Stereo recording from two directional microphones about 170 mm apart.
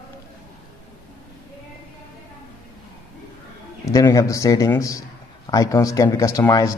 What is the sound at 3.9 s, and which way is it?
A man's voice, 20° left (ahead or behind).